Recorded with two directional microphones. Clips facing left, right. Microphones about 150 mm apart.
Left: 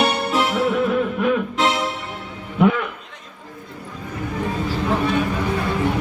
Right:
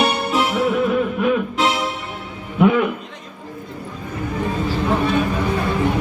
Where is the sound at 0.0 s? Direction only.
15° right (ahead or behind).